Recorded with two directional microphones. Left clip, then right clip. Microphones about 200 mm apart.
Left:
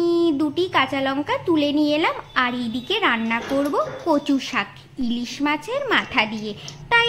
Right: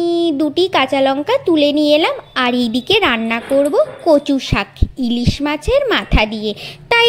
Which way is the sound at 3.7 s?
20° right (ahead or behind).